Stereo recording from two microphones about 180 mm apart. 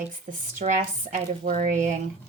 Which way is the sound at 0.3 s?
45° right (ahead or behind).